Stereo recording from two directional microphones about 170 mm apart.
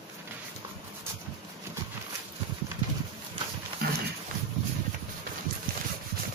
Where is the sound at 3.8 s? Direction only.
65° right (ahead or behind).